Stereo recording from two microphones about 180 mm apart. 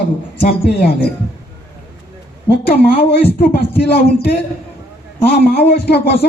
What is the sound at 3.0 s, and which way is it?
Speech, 65° left (ahead or behind).